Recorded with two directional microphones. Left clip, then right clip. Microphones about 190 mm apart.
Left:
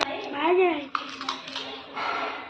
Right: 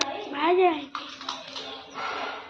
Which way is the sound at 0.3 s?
20° right (ahead or behind).